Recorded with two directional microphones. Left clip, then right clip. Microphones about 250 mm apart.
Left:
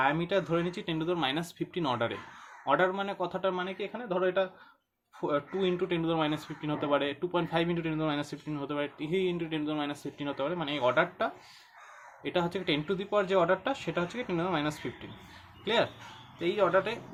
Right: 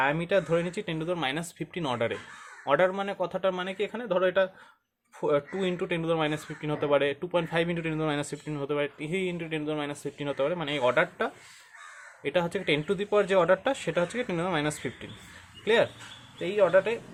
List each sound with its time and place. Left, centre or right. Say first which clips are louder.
0.0 s speech: right 2 dB; right